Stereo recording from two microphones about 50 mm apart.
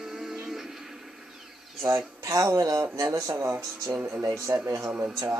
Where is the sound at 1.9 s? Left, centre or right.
Right.